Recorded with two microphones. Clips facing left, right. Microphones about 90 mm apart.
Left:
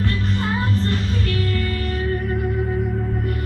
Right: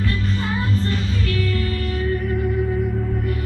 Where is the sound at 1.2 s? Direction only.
50° left (ahead or behind).